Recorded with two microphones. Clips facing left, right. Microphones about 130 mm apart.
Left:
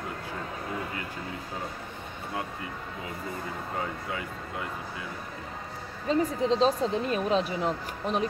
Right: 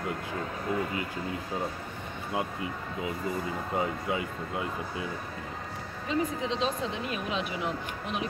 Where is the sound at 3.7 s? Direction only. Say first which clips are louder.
Right 5 dB; 20° right (ahead or behind).